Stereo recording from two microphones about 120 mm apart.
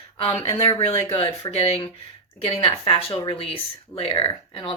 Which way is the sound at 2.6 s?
50° left (ahead or behind).